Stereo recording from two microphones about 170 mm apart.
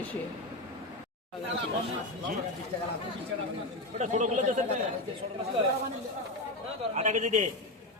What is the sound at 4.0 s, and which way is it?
Speech, 45° right (ahead or behind).